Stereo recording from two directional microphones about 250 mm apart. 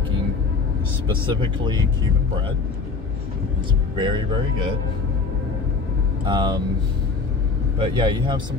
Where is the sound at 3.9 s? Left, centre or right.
Centre.